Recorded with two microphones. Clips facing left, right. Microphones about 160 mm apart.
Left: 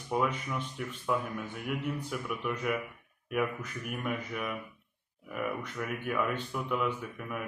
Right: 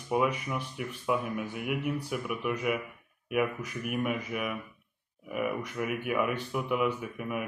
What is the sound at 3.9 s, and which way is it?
Speech, 10° right (ahead or behind).